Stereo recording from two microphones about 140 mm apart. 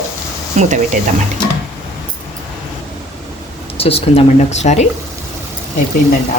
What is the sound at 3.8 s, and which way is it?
Speech, 45° left (ahead or behind).